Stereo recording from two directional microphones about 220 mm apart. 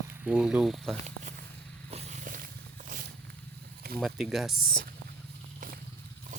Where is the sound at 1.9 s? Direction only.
30° right (ahead or behind).